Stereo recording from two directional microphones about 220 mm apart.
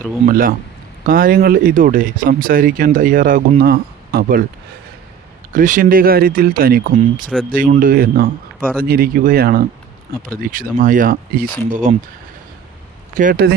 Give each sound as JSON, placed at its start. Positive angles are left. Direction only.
{"t": 0.3, "sound": "speech", "side_deg": -40}
{"t": 5.5, "sound": "speech", "side_deg": -35}
{"t": 13.1, "sound": "speech", "side_deg": -40}